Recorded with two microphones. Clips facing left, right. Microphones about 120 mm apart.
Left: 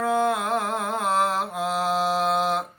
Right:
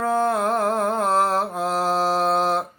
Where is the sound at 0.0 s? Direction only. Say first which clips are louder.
Right 2 dB; 35° right (ahead or behind).